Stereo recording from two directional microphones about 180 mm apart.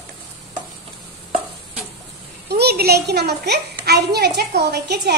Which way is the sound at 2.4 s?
65° right (ahead or behind).